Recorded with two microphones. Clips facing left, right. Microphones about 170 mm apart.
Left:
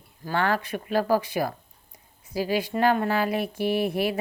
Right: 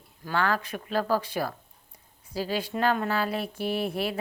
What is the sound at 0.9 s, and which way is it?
Speech, 10° left (ahead or behind).